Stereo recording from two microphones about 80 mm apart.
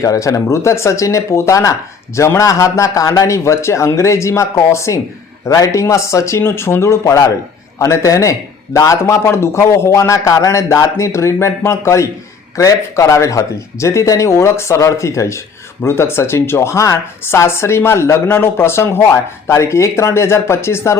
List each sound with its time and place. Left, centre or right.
0.0 s a man's voice: left